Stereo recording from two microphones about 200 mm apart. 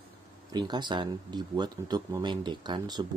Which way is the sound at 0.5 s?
20° right (ahead or behind).